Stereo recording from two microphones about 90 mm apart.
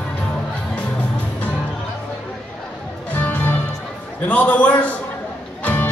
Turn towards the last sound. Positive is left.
turn(degrees=20)  # may be behind; listen again after turning